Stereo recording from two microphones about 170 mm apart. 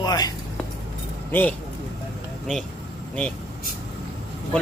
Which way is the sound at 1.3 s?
10° left (ahead or behind).